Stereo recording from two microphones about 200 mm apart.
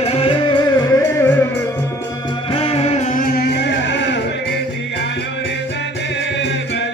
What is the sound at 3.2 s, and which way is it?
Music, 50° left (ahead or behind).